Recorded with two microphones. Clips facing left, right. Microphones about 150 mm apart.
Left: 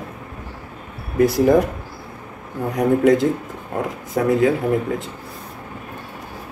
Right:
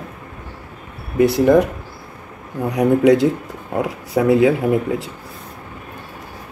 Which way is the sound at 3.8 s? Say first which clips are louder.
Right 3 dB; 10° right (ahead or behind).